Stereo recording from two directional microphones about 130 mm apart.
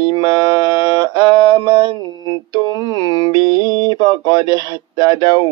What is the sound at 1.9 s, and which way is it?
Mantra, 35° left (ahead or behind).